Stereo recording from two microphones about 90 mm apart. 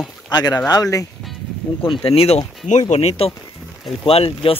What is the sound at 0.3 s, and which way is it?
Speech, 45° left (ahead or behind).